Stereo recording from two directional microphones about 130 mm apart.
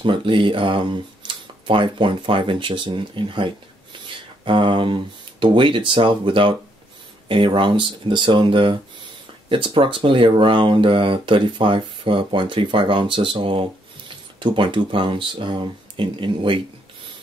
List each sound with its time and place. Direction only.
0.0 s speech: 40° right (ahead or behind)